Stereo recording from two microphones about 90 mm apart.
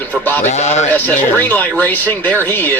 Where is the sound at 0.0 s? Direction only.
20° left (ahead or behind).